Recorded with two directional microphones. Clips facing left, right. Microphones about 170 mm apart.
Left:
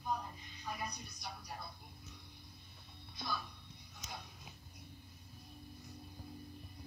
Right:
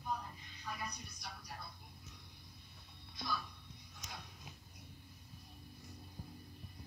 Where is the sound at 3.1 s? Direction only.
25° left (ahead or behind).